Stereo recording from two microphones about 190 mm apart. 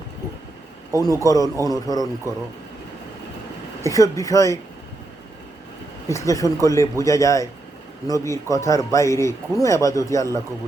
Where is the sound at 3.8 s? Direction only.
15° left (ahead or behind).